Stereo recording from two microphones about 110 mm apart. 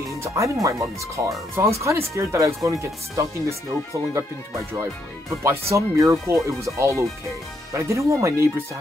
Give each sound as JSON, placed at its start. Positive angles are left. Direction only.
{"t": 0.1, "sound": "speech", "side_deg": -30}
{"t": 5.4, "sound": "speech", "side_deg": -25}